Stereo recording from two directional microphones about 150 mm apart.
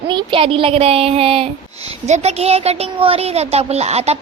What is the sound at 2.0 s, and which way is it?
Speech, 45° right (ahead or behind).